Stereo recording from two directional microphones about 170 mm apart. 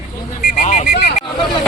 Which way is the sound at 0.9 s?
60° left (ahead or behind).